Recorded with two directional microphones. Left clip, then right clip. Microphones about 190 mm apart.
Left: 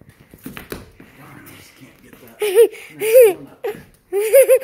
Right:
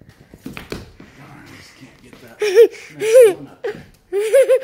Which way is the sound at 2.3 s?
5° right (ahead or behind).